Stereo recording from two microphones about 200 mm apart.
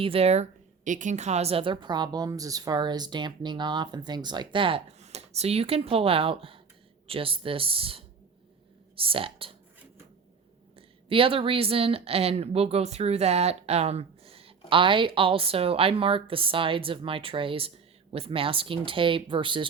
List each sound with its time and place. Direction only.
0.0 s a woman's voice: 30° right (ahead or behind)
10.8 s a woman's voice: 25° right (ahead or behind)